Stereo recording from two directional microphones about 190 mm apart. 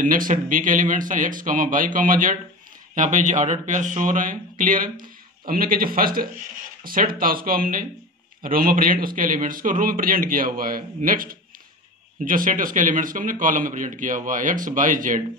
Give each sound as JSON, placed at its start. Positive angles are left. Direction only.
{"t": 0.0, "sound": "speech", "side_deg": -45}